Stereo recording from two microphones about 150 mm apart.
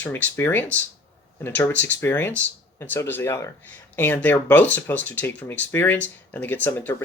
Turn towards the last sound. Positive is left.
turn(degrees=10)  # may be behind; listen again after turning